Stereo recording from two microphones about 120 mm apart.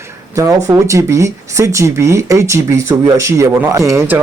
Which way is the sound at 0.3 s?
25° right (ahead or behind).